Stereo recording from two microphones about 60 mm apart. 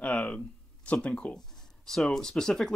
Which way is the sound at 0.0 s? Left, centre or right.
Left.